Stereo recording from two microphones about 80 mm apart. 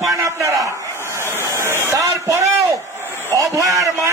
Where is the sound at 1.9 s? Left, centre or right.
Right.